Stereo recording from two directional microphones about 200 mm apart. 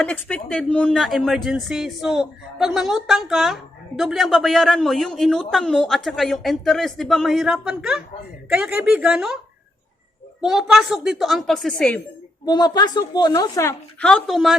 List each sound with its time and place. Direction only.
0.0 s speech: 5° left (ahead or behind)
10.4 s speech: 5° right (ahead or behind)
12.5 s a woman's voice: 20° left (ahead or behind)
14.0 s speech: 5° left (ahead or behind)